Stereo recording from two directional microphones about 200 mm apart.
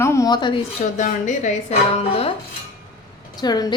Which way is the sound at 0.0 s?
15° left (ahead or behind).